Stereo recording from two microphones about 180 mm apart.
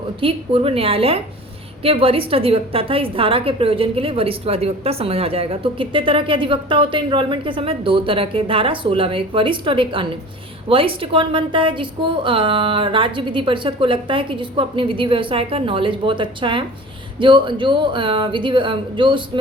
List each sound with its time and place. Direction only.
0.2 s a woman's voice: 30° right (ahead or behind)